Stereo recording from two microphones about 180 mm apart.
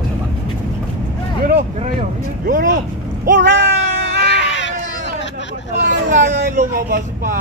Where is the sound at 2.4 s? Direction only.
45° right (ahead or behind).